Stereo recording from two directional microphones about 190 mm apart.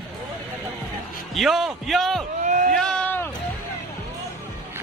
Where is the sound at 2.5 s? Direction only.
45° right (ahead or behind).